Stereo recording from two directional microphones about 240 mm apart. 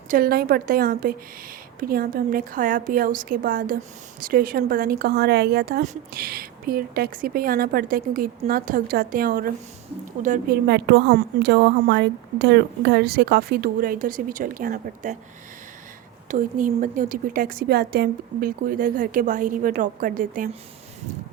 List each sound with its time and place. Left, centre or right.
0.1 s a woman's voice: right
16.3 s speech: right